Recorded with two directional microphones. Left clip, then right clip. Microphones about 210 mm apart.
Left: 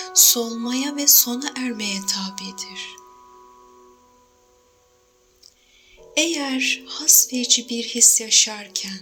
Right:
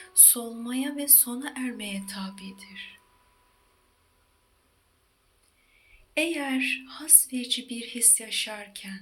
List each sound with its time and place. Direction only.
0.0 s music: 35° left (ahead or behind)
6.1 s music: 35° left (ahead or behind)